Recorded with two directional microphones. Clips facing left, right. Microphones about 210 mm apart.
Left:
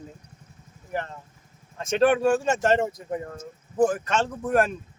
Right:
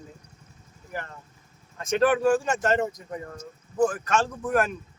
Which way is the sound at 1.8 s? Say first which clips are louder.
Left 2 dB; 25° left (ahead or behind).